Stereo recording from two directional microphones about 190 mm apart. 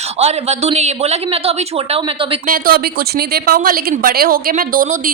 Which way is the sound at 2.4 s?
50° right (ahead or behind).